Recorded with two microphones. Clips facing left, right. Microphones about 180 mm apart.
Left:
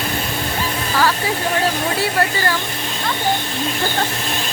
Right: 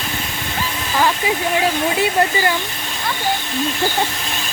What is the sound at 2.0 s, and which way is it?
Speech, 20° right (ahead or behind).